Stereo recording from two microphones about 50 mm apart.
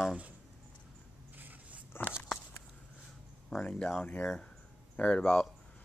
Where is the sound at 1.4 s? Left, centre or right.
Right.